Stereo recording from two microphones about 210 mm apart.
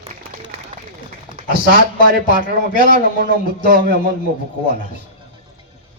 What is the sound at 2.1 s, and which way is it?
Speech, 40° left (ahead or behind).